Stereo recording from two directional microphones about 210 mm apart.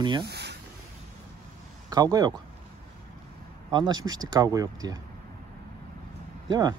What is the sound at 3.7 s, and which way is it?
Speech, 20° right (ahead or behind).